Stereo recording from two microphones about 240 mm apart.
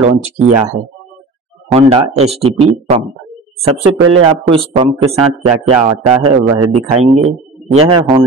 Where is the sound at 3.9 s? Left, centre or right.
Right.